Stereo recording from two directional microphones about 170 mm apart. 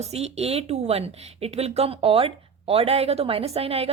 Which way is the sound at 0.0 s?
40° right (ahead or behind).